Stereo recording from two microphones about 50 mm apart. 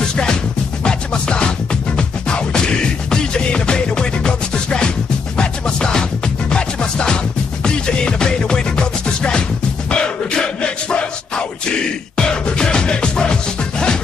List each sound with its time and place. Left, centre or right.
0.1 s music: centre